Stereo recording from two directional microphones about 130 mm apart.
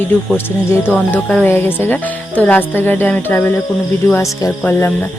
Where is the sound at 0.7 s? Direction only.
15° left (ahead or behind).